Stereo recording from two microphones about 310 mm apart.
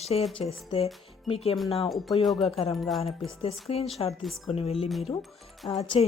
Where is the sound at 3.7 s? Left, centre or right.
Centre.